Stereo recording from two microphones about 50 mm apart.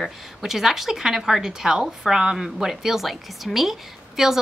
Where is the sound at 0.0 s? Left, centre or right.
Centre.